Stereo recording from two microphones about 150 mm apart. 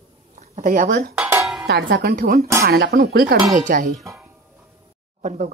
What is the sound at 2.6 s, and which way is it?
Speech, 90° right.